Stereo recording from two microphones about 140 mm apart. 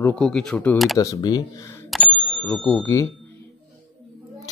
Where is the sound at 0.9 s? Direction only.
25° left (ahead or behind).